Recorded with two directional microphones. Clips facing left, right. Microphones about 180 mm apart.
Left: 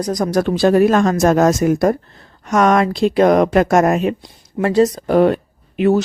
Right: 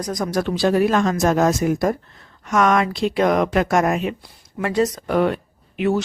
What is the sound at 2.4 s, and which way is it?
Speech, 35° left (ahead or behind).